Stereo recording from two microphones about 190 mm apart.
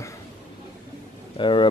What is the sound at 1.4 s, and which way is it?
Speech, 25° left (ahead or behind).